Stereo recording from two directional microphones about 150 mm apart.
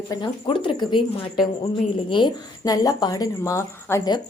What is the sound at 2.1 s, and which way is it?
A woman's voice, 30° left (ahead or behind).